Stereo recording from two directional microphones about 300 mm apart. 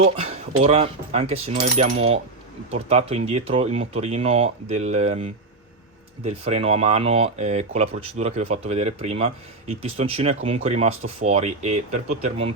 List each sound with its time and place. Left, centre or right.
0.6 s speech: right